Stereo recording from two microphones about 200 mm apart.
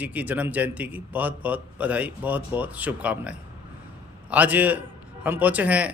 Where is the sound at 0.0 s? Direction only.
10° right (ahead or behind).